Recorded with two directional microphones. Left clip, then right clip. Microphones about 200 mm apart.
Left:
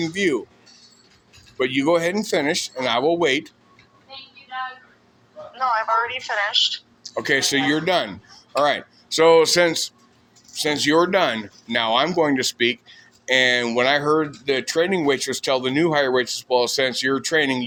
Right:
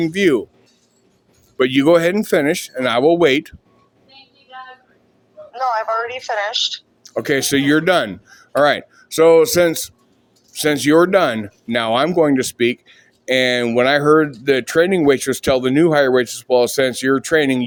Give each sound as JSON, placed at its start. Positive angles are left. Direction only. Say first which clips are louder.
{"t": 0.0, "sound": "speech", "louder": "right 6 dB", "side_deg": -55}
{"t": 1.5, "sound": "speech", "louder": "right 6 dB", "side_deg": -60}
{"t": 5.5, "sound": "a woman's voice", "louder": "right 1 dB", "side_deg": -45}